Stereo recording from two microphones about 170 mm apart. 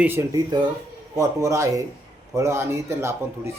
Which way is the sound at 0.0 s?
15° right (ahead or behind).